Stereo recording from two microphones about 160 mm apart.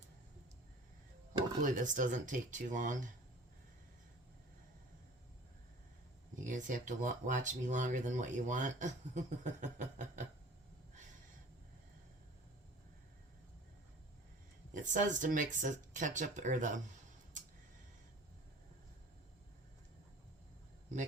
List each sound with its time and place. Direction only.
1.6 s speech: 55° right (ahead or behind)
6.4 s speech: 50° right (ahead or behind)
14.7 s speech: 50° right (ahead or behind)